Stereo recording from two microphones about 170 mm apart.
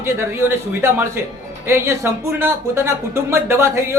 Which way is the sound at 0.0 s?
15° right (ahead or behind).